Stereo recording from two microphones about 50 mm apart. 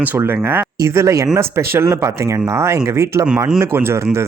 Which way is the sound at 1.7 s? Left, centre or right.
Right.